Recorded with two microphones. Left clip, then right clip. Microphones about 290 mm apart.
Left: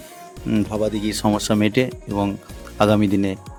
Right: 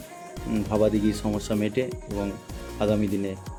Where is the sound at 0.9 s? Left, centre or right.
Left.